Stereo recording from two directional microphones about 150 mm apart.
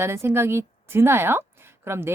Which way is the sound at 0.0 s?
15° right (ahead or behind).